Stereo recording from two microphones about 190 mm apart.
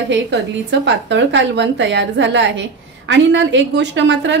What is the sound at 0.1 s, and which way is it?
A woman's voice, 70° right (ahead or behind).